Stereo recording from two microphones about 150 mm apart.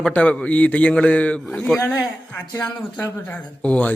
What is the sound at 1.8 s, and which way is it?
A man's voice, 25° left (ahead or behind).